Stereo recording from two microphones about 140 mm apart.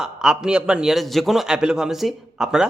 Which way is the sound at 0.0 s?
5° right (ahead or behind).